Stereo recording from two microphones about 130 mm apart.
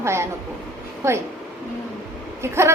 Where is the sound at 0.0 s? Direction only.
20° right (ahead or behind).